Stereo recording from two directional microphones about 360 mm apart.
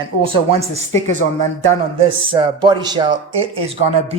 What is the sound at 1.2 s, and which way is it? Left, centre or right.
Speech, left.